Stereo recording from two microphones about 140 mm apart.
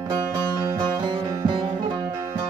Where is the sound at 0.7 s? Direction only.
30° right (ahead or behind).